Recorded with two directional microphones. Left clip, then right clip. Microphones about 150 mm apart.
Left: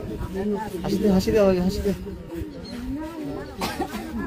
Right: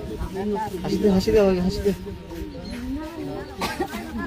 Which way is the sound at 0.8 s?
70° left (ahead or behind).